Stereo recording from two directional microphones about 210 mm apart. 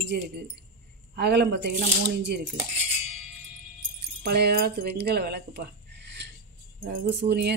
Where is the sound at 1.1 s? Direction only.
50° right (ahead or behind).